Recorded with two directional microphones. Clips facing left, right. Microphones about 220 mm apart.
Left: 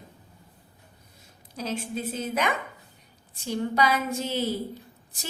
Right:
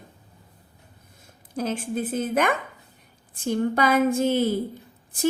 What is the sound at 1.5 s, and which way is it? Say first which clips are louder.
A woman's voice: right 5 dB; 55° right (ahead or behind).